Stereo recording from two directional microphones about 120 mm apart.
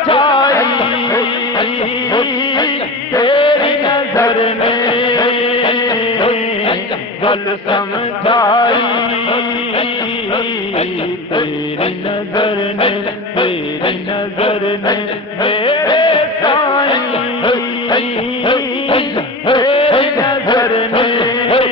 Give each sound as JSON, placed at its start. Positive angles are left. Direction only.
{"t": 0.1, "sound": "music", "side_deg": 40}
{"t": 2.1, "sound": "music", "side_deg": 35}
{"t": 3.2, "sound": "a sound", "side_deg": 45}
{"t": 4.3, "sound": "chant", "side_deg": 45}
{"t": 8.6, "sound": "music", "side_deg": 40}
{"t": 15.4, "sound": "music", "side_deg": 45}
{"t": 20.2, "sound": "music", "side_deg": 30}
{"t": 20.9, "sound": "music", "side_deg": 45}